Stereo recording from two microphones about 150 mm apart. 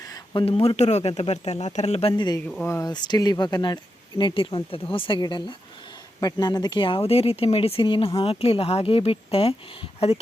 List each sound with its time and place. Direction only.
0.0 s a sound: 25° left (ahead or behind)
0.4 s speech: 40° left (ahead or behind)
2.6 s speech: 15° left (ahead or behind)
2.9 s speech: 30° left (ahead or behind)